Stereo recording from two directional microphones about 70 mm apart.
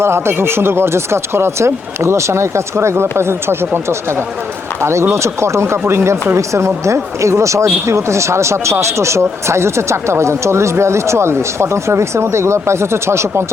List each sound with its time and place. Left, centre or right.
0.0 s speech: right
4.8 s speech: right